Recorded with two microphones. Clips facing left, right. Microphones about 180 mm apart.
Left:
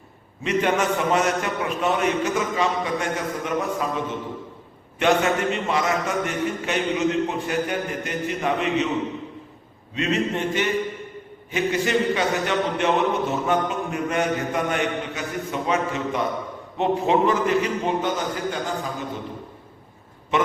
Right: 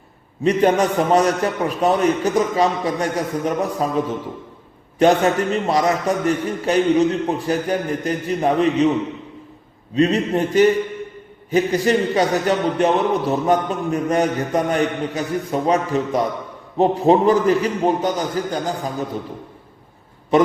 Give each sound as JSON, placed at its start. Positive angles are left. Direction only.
{"t": 0.4, "sound": "a man's voice", "side_deg": -40}
{"t": 9.9, "sound": "a man's voice", "side_deg": -35}